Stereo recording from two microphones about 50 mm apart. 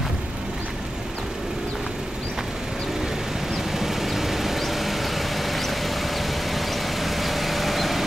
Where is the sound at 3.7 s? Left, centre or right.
Centre.